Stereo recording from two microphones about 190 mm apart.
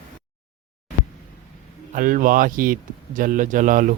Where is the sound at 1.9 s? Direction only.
45° right (ahead or behind).